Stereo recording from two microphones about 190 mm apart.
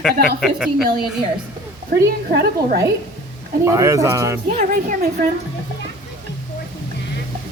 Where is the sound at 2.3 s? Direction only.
55° right (ahead or behind).